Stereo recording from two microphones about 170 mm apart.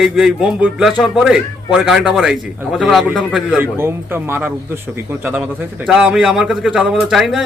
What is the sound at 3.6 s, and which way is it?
Speech, 15° right (ahead or behind).